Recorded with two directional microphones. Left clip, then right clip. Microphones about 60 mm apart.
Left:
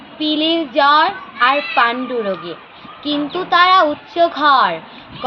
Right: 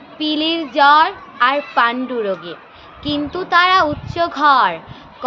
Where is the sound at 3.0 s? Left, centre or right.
Right.